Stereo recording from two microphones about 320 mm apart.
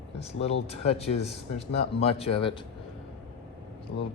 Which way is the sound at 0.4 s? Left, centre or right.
Centre.